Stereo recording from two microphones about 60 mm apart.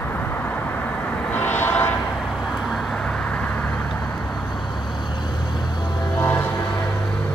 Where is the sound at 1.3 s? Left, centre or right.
Left.